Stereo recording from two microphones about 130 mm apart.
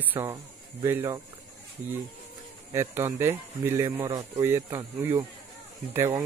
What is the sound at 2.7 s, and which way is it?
Speech, 20° right (ahead or behind).